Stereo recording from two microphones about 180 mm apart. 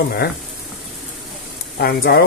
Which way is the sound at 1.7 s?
60° left (ahead or behind).